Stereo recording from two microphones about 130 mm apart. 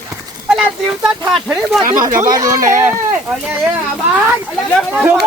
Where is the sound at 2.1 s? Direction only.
25° right (ahead or behind).